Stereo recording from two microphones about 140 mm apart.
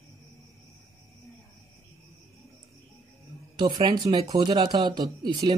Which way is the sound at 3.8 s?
30° right (ahead or behind).